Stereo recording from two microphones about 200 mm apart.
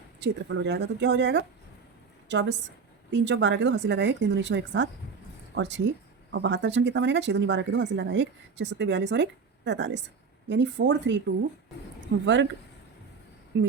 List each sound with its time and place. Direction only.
0.2 s speech: 60° right (ahead or behind)
12.2 s speech: 65° right (ahead or behind)
13.5 s speech: 65° right (ahead or behind)